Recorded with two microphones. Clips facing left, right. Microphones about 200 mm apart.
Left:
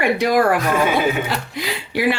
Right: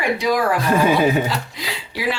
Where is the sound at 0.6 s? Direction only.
35° right (ahead or behind).